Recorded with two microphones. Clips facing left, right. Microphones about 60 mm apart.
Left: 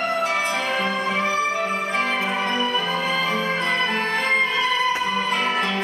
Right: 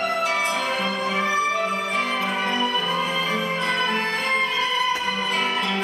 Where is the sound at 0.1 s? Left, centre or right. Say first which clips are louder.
Left 1 dB; left.